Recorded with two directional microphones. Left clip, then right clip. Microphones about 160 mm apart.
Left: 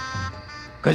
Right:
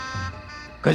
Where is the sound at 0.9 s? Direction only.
Centre (ahead or behind).